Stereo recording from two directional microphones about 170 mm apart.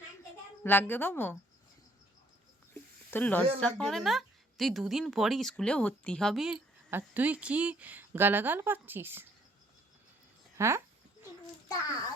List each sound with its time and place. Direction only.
0.6 s a woman's voice: 10° left (ahead or behind)
3.1 s a woman's voice: 10° left (ahead or behind); by 9.2 s 15° right (ahead or behind)
10.6 s a sound: 15° right (ahead or behind)